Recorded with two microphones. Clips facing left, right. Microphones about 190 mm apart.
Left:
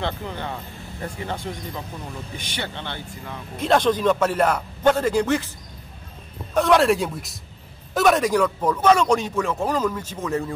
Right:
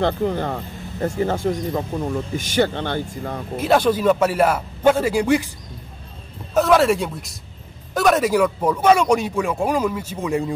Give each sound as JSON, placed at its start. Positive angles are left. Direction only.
{"t": 0.0, "sound": "speech", "side_deg": -40}
{"t": 3.5, "sound": "speech", "side_deg": -5}
{"t": 6.5, "sound": "speech", "side_deg": 0}